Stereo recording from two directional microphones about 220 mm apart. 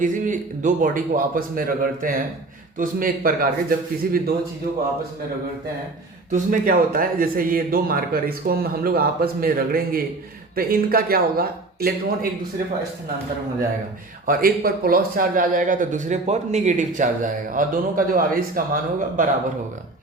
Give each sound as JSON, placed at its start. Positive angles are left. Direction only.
{"t": 0.0, "sound": "speech", "side_deg": -35}
{"t": 6.3, "sound": "speech", "side_deg": -40}
{"t": 14.3, "sound": "speech", "side_deg": -40}